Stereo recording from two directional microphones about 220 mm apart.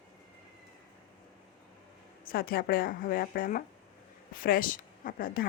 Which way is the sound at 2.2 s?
45° left (ahead or behind).